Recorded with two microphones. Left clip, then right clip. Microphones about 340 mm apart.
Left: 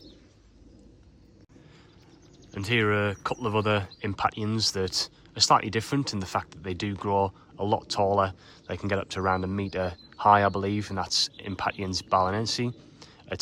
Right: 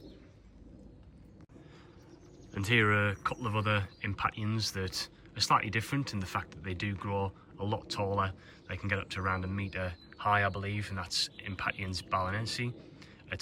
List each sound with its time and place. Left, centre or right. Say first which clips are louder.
2.5 s speech: left 2 dB; centre